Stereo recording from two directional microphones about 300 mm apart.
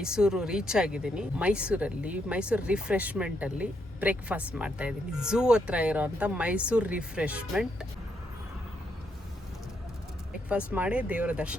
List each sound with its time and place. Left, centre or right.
0.0 s speech: centre
10.7 s speech: centre